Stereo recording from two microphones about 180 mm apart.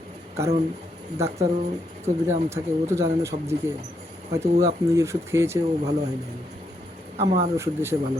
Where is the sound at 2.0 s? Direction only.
15° right (ahead or behind).